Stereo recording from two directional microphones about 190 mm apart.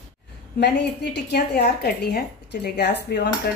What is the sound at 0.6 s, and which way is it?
A woman's voice, 65° left (ahead or behind).